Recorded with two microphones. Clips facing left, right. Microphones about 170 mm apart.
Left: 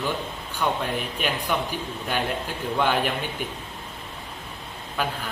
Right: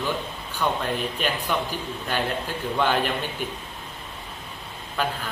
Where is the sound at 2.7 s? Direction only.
10° left (ahead or behind).